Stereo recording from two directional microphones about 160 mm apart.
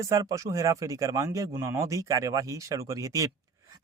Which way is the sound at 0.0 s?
20° right (ahead or behind).